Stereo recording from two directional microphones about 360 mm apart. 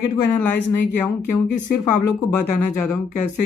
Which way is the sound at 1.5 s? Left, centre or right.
Left.